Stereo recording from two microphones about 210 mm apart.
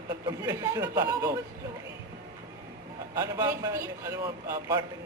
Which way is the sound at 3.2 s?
15° right (ahead or behind).